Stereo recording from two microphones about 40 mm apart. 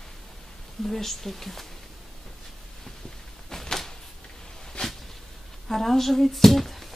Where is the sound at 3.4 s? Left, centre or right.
Centre.